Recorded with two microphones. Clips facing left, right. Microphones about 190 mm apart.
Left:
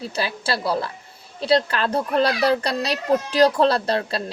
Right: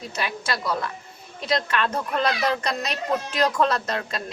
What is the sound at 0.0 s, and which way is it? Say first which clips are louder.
Speech: left 3 dB; 30° left (ahead or behind).